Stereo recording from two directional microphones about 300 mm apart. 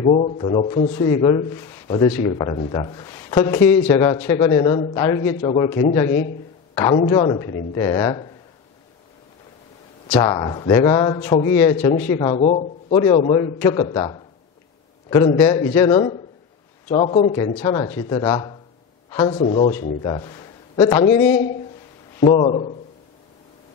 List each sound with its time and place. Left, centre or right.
0.0 s speech: left
6.7 s a sound: centre
7.0 s speech: centre
10.0 s speech: centre
10.3 s speech: centre
21.1 s a man's voice: left
22.2 s speech: centre